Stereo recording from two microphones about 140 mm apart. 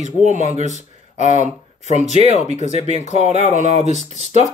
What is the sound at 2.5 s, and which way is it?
Speech, 55° left (ahead or behind).